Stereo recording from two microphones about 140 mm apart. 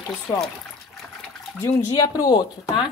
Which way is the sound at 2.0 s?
25° left (ahead or behind).